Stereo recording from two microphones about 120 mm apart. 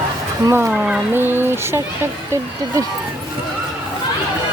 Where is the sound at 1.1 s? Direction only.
20° right (ahead or behind).